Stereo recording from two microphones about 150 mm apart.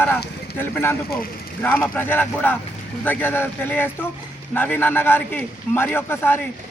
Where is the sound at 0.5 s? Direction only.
15° left (ahead or behind).